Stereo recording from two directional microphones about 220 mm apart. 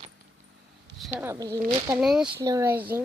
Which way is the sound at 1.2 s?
10° right (ahead or behind).